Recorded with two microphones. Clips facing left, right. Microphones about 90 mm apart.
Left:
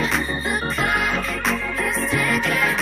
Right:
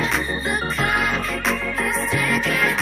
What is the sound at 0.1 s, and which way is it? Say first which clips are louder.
Music: even; centre (ahead or behind).